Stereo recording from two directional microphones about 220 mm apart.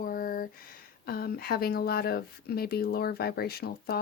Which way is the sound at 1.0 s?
45° left (ahead or behind).